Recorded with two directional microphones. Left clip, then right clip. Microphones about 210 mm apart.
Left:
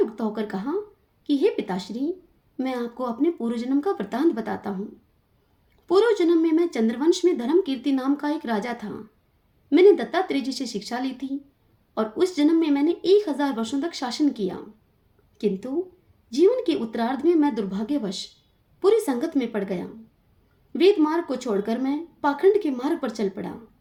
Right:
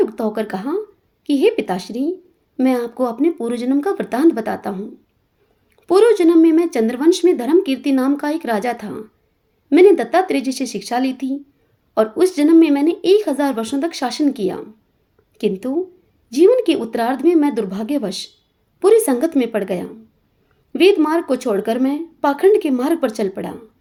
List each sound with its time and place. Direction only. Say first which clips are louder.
0.0 s speech: right 7 dB; 35° right (ahead or behind)
5.8 s speech: right 7 dB; 35° right (ahead or behind)